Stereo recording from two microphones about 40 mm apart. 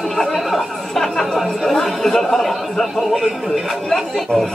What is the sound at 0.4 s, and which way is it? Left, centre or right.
Chatter, centre.